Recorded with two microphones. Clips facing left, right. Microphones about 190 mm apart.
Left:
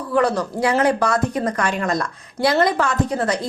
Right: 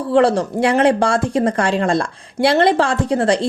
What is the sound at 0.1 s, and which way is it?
Speech, 30° right (ahead or behind).